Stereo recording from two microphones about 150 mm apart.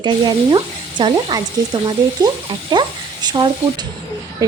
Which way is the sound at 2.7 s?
30° right (ahead or behind).